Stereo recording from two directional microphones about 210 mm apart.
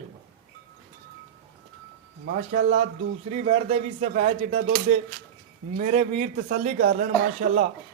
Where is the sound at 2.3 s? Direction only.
45° right (ahead or behind).